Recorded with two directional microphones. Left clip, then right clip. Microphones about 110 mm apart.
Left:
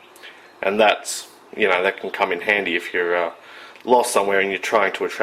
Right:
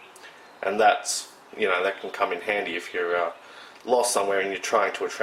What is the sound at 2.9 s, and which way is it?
Speech, 30° left (ahead or behind).